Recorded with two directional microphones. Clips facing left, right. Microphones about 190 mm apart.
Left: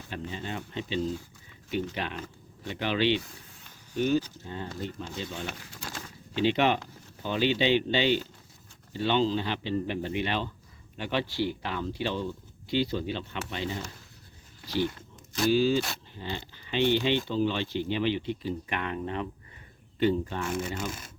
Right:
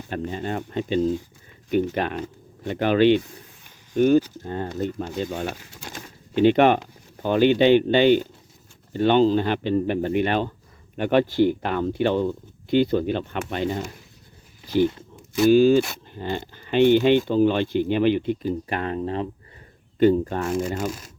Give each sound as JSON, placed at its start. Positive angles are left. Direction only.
{"t": 0.1, "sound": "speech", "side_deg": -50}
{"t": 20.0, "sound": "speech", "side_deg": -45}